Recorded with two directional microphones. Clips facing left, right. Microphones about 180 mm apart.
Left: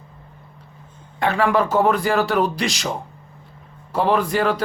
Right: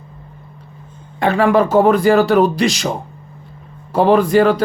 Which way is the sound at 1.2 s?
40° right (ahead or behind).